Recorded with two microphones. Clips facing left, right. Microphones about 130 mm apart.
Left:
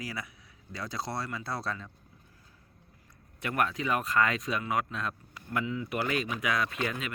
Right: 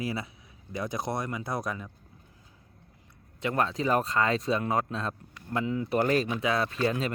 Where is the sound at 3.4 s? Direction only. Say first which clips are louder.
Right 3 dB; 25° right (ahead or behind); by 6.3 s 40° right (ahead or behind).